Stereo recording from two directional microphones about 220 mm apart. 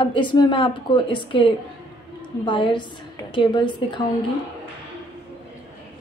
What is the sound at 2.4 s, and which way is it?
A woman's voice, 20° left (ahead or behind).